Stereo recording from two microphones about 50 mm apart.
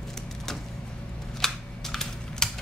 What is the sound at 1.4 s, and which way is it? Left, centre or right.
Typing, centre.